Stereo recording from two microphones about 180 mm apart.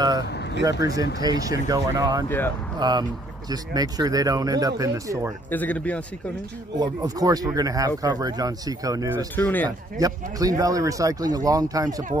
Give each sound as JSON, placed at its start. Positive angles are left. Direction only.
{"t": 0.6, "sound": "speech", "side_deg": -20}
{"t": 2.2, "sound": "speech", "side_deg": 10}
{"t": 2.8, "sound": "speech", "side_deg": -25}
{"t": 5.5, "sound": "speech", "side_deg": 10}
{"t": 6.8, "sound": "speech", "side_deg": -20}
{"t": 9.3, "sound": "speech", "side_deg": 10}
{"t": 9.7, "sound": "speech", "side_deg": -20}